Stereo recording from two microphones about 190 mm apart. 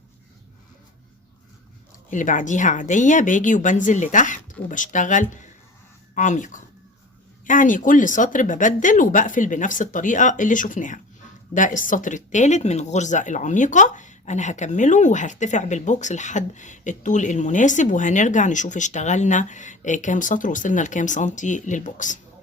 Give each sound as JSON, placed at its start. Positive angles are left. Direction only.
{"t": 2.0, "sound": "speech", "side_deg": 40}